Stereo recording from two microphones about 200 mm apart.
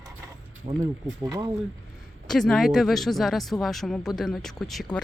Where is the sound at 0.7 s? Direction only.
30° right (ahead or behind).